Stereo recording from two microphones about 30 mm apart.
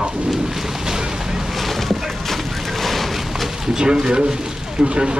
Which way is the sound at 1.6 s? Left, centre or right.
Centre.